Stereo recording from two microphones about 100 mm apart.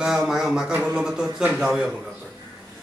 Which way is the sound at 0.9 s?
5° right (ahead or behind).